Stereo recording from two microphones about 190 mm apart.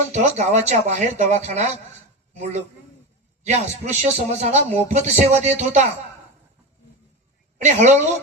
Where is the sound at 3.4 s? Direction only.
35° right (ahead or behind).